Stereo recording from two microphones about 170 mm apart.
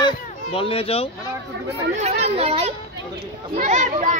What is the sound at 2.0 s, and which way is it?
Speech, 40° right (ahead or behind).